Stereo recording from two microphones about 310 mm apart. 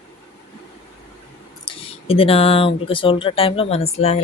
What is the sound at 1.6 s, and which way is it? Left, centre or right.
Speech, centre.